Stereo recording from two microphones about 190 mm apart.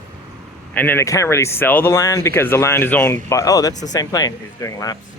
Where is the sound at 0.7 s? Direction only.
10° left (ahead or behind).